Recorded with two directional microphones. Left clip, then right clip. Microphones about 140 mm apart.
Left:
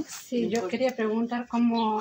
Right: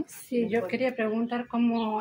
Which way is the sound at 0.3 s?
15° right (ahead or behind).